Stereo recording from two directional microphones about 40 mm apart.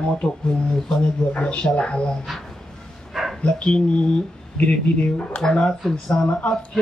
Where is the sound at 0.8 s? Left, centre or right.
Centre.